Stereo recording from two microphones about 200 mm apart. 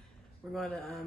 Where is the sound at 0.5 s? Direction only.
Centre (ahead or behind).